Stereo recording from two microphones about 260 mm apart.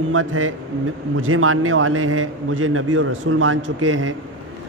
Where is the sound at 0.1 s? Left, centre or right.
Right.